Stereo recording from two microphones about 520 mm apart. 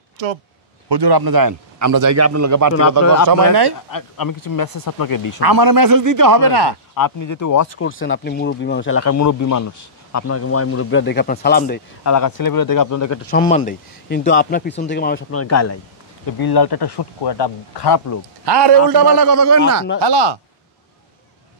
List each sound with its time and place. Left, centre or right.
0.8 s a man's voice: right
3.0 s speech: left
5.4 s a man's voice: right
7.0 s speech: left; by 11.8 s centre
12.0 s speech: left
13.3 s speech: centre
16.3 s speech: left
18.4 s a man's voice: right
20.0 s speech: right